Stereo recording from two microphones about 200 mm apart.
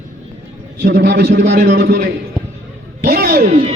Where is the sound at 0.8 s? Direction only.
45° right (ahead or behind).